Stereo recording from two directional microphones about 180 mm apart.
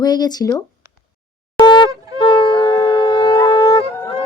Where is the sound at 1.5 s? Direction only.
20° right (ahead or behind).